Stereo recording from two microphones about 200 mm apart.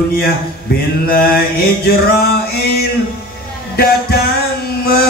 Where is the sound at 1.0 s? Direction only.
50° left (ahead or behind).